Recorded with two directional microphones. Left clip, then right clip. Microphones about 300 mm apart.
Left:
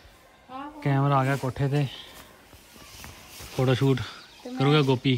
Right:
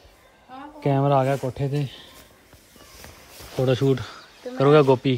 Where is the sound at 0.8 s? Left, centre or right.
Centre.